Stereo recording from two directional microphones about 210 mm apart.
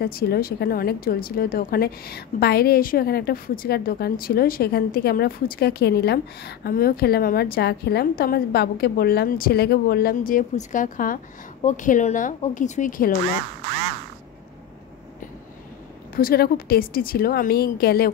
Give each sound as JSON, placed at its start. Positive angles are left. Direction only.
{"t": 0.0, "sound": "a woman's voice", "side_deg": 45}
{"t": 16.2, "sound": "speech", "side_deg": 45}